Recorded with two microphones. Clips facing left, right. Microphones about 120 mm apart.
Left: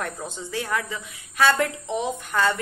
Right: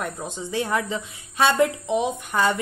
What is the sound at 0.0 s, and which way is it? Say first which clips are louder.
A woman's voice: right 1 dB; 15° right (ahead or behind).